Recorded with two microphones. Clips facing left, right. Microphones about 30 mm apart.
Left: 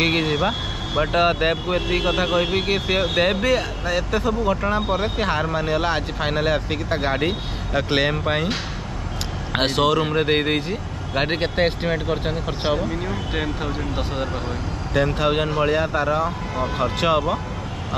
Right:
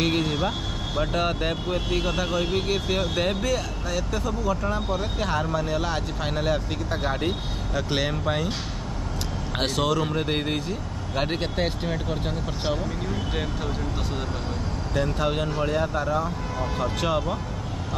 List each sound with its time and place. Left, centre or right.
0.0 s speech: left
9.5 s speech: left
10.0 s speech: left
15.0 s speech: left
15.7 s speech: left
16.5 s speech: left